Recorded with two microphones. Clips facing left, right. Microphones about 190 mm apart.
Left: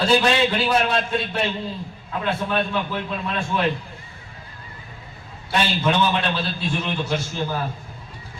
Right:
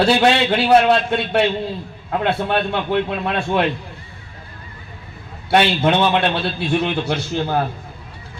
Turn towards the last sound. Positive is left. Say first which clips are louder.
# right 5 dB
turn(degrees=-65)  # may be behind; listen again after turning